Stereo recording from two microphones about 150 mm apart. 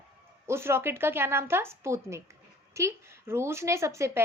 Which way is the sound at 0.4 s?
15° right (ahead or behind).